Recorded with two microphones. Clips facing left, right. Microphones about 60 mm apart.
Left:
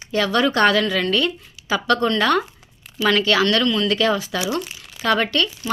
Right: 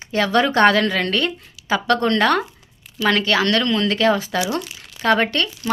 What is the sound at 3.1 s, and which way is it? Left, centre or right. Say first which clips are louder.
A woman's voice: even; right.